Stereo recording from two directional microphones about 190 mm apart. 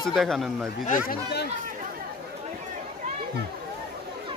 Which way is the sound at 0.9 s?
50° left (ahead or behind).